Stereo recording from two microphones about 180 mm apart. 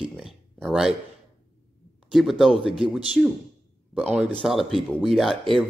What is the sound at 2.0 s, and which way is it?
Speech, centre (ahead or behind).